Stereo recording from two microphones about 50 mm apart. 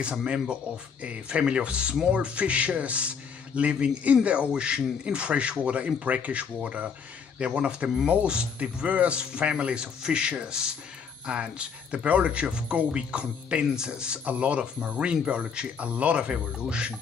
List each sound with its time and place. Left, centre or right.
0.0 s speech: right